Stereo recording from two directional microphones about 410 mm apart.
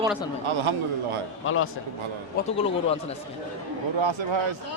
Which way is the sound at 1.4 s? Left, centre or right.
Left.